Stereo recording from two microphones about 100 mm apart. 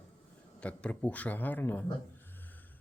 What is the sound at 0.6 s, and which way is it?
Speech, 10° left (ahead or behind).